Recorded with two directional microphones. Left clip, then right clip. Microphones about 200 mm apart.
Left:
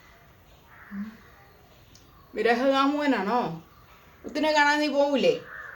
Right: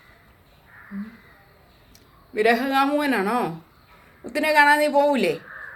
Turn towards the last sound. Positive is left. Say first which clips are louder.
# right 4 dB
turn(degrees=-40)  # may be behind; listen again after turning